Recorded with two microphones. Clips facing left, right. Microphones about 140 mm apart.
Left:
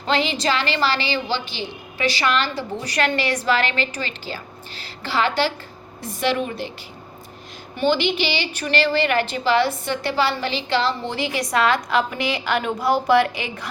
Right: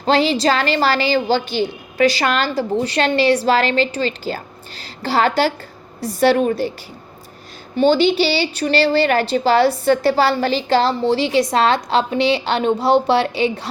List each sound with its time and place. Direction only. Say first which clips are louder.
0.0 s a woman's voice: right 6 dB; 35° right (ahead or behind)
2.8 s a woman's voice: right 5 dB; 25° right (ahead or behind)
7.8 s a woman's voice: right 6 dB; 30° right (ahead or behind)